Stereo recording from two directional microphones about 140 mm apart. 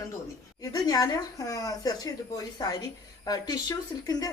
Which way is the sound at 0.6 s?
25° left (ahead or behind).